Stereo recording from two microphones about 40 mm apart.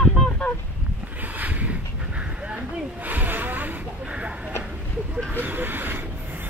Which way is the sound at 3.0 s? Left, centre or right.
Right.